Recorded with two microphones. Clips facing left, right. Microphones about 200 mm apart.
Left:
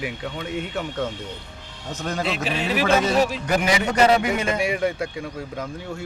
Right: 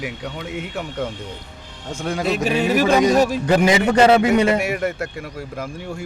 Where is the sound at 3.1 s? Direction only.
45° right (ahead or behind).